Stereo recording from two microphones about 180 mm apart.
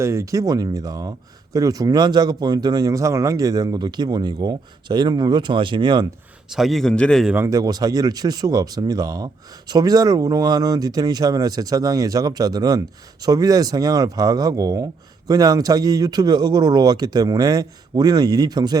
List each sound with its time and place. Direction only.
0.0 s speech: 15° right (ahead or behind)
6.5 s speech: centre (ahead or behind)
7.3 s speech: 20° right (ahead or behind)